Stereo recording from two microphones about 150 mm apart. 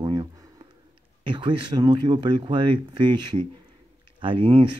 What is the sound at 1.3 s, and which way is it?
Speech, 30° right (ahead or behind).